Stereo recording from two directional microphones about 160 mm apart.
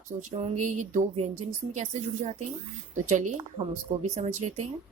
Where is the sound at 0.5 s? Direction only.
50° right (ahead or behind).